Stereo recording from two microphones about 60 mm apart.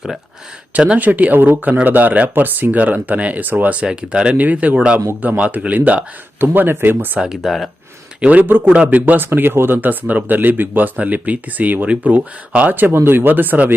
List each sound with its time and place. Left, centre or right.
0.7 s speech: centre
0.9 s speech: right
4.4 s speech: right
6.4 s speech: right
7.2 s speech: centre
8.2 s speech: right
8.7 s speech: right